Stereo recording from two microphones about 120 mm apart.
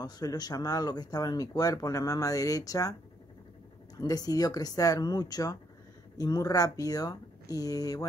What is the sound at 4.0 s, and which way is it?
Speech, 30° left (ahead or behind).